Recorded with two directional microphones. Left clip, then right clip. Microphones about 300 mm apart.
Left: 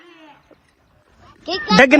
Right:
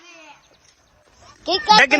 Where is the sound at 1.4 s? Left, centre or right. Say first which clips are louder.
Right 6 dB; right.